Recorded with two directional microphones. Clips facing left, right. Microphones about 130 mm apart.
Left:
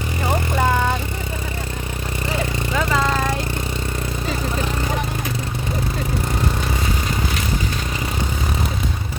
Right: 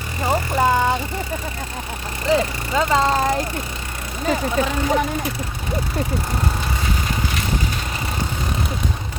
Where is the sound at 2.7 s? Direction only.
25° right (ahead or behind).